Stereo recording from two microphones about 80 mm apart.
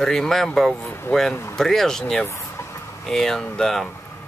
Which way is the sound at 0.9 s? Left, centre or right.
Left.